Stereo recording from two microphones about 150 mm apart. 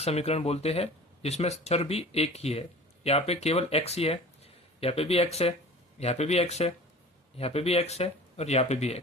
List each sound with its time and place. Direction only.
0.0 s speech: 45° left (ahead or behind)